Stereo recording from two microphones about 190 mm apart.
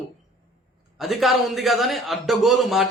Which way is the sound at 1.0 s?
Centre (ahead or behind).